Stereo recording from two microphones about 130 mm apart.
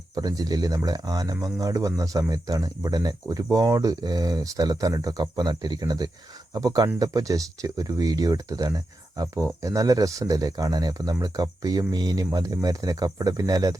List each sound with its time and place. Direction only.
0.2 s speech: 30° right (ahead or behind)